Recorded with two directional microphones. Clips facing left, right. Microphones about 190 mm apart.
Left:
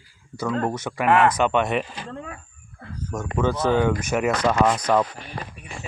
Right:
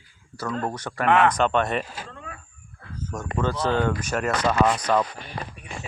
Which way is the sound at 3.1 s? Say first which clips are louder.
Left 3 dB; 5° left (ahead or behind).